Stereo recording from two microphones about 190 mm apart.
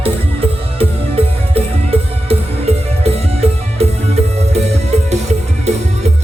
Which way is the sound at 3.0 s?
35° right (ahead or behind).